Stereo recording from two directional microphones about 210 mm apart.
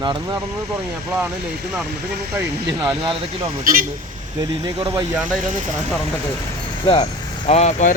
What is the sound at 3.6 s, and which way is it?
Speech, 40° right (ahead or behind).